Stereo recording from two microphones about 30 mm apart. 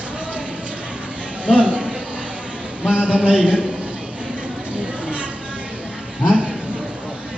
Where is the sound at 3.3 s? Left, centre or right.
Right.